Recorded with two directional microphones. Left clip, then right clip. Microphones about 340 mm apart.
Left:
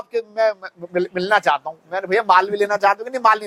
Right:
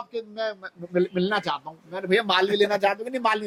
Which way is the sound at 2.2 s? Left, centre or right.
Left.